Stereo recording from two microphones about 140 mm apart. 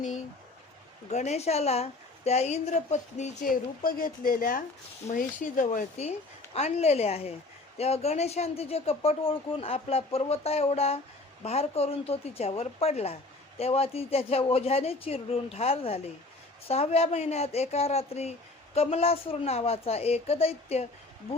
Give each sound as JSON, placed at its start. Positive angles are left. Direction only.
{"t": 1.1, "sound": "speech", "side_deg": 50}
{"t": 3.4, "sound": "speech", "side_deg": 90}
{"t": 5.1, "sound": "speech", "side_deg": 70}
{"t": 6.0, "sound": "speech", "side_deg": 50}